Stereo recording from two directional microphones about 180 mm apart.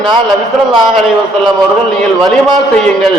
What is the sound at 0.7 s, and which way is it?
A man's voice, centre (ahead or behind).